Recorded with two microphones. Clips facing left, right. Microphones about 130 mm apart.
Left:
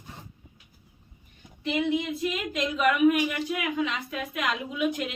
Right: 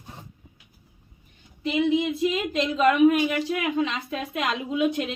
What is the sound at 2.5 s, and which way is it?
A woman's voice, 30° right (ahead or behind).